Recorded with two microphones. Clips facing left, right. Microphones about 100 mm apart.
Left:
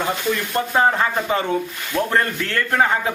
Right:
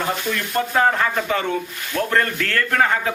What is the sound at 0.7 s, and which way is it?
A man's voice, 20° left (ahead or behind).